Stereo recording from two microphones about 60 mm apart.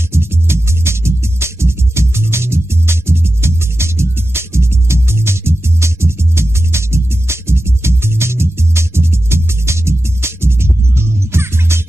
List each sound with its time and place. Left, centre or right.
0.1 s music: right